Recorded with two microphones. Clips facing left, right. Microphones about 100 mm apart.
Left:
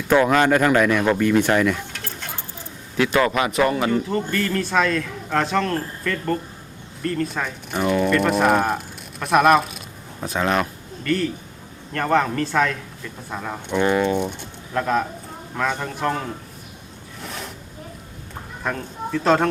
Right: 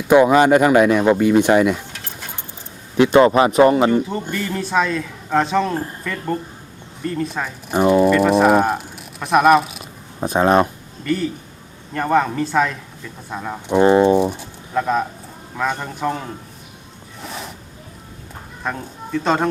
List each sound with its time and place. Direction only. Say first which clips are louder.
0.1 s a man's voice: right 5 dB; 15° right (ahead or behind)
3.0 s speech: right 7 dB; 25° right (ahead or behind)
3.9 s a man's voice: right 1 dB; 10° right (ahead or behind)
7.7 s speech: right 7 dB; 30° right (ahead or behind)
8.0 s speech: right 5 dB; 5° right (ahead or behind)
10.2 s speech: right 7 dB; 30° right (ahead or behind)
11.0 s a man's voice: right 1 dB; 5° right (ahead or behind)
13.7 s speech: right 7 dB; 30° right (ahead or behind)
14.2 s a man's voice: right 6 dB; centre (ahead or behind)
17.2 s a sound: right 2 dB; centre (ahead or behind)
18.6 s speech: even; 5° right (ahead or behind)